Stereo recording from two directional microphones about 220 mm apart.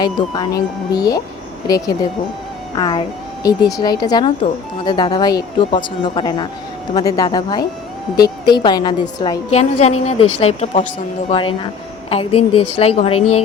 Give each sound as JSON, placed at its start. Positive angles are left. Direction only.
{"t": 0.0, "sound": "a woman's voice", "side_deg": 20}